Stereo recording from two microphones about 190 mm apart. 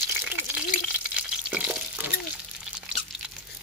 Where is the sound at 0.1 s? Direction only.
10° right (ahead or behind).